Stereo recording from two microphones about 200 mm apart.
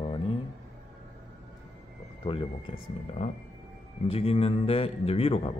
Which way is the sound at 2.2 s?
25° left (ahead or behind).